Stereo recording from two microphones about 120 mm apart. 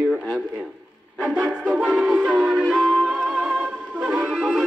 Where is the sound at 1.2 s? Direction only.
10° right (ahead or behind).